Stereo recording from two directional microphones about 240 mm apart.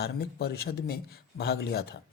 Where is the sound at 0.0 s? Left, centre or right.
Left.